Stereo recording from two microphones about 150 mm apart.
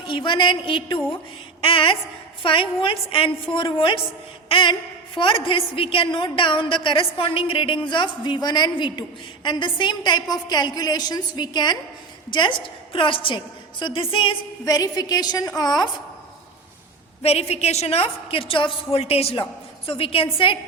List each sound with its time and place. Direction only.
0.0 s a woman's voice: 35° left (ahead or behind)
17.2 s a woman's voice: 45° left (ahead or behind)